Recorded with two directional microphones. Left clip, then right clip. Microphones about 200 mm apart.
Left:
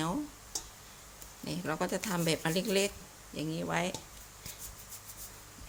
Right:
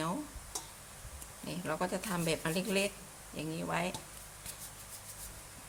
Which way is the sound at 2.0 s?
30° left (ahead or behind).